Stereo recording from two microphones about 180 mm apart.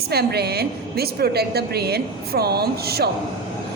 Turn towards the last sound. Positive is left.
turn(degrees=-60)  # may be behind; listen again after turning